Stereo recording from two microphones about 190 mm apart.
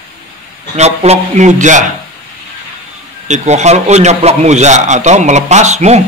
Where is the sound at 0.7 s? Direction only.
35° right (ahead or behind).